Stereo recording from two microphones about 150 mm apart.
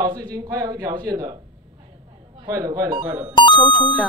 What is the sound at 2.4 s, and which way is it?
Speech, 25° right (ahead or behind).